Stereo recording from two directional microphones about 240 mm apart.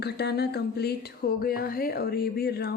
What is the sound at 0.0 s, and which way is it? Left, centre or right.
Music, left.